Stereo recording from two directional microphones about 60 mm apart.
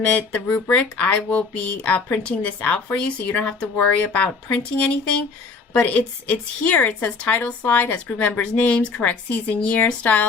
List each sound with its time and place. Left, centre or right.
0.0 s a woman's voice: left